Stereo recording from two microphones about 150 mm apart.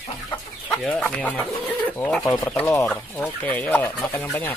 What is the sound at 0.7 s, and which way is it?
Speech, 5° left (ahead or behind).